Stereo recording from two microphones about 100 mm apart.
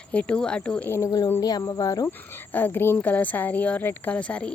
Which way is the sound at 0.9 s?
30° left (ahead or behind).